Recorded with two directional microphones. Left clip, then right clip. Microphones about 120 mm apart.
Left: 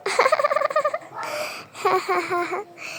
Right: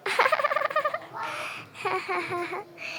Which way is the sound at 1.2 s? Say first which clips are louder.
Left 4 dB; 45° left (ahead or behind).